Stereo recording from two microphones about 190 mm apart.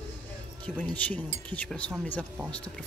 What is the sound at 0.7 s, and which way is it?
Speech, 10° left (ahead or behind).